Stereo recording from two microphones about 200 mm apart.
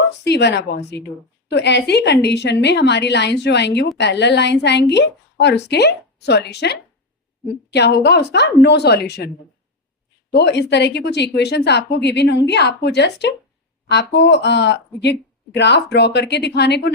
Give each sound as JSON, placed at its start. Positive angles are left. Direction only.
{"t": 0.3, "sound": "a woman's voice", "side_deg": 60}
{"t": 10.3, "sound": "a woman's voice", "side_deg": 55}